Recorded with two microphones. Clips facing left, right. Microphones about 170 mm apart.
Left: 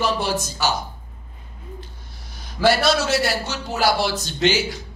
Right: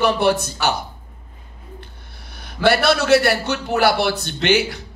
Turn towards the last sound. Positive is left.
turn(degrees=-60)  # may be behind; listen again after turning